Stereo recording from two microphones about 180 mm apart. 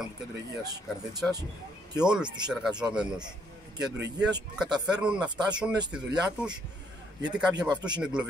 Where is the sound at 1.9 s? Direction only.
5° right (ahead or behind).